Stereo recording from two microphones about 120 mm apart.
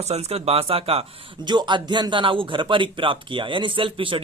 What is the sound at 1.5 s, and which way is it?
Speech, 40° right (ahead or behind).